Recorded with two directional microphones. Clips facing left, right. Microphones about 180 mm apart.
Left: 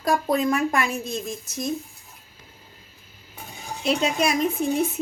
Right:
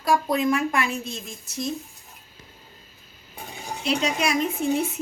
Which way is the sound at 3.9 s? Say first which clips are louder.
Left 2 dB; 40° left (ahead or behind).